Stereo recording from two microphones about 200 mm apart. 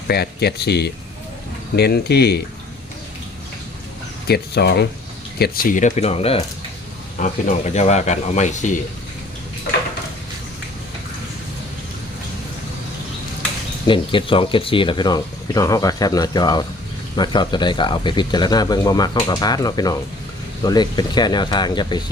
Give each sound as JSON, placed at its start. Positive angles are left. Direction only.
{"t": 0.1, "sound": "speech", "side_deg": 55}
{"t": 4.3, "sound": "speech", "side_deg": 55}
{"t": 5.4, "sound": "speech", "side_deg": 45}
{"t": 13.8, "sound": "speech", "side_deg": 25}